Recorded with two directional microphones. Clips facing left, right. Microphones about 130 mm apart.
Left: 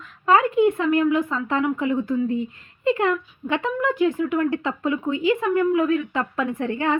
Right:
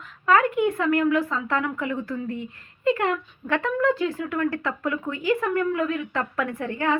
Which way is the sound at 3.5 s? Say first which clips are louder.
Right 1 dB; 20° left (ahead or behind).